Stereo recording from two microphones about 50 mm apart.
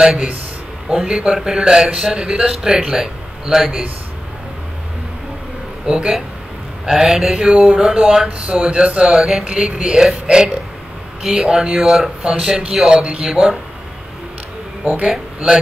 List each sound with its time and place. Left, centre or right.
0.0 s speech: centre
5.9 s speech: centre
6.9 s speech: centre
7.3 s speech: centre
8.5 s speech: right
9.0 s speech: centre
12.2 s speech: centre
13.2 s speech: centre
14.9 s speech: right